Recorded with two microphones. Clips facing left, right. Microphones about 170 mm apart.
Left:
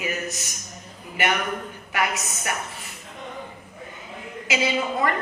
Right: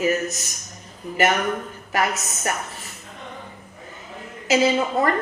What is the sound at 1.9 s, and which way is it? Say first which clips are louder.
Speech: right 3 dB; 40° right (ahead or behind).